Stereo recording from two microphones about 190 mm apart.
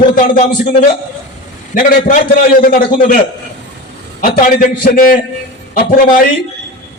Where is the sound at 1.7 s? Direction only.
45° left (ahead or behind).